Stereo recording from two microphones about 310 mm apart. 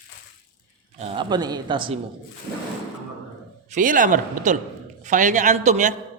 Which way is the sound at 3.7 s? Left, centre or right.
Right.